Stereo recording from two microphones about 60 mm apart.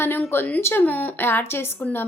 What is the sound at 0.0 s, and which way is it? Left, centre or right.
A woman's voice, left.